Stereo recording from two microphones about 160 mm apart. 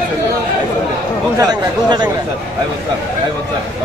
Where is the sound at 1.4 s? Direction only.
25° right (ahead or behind).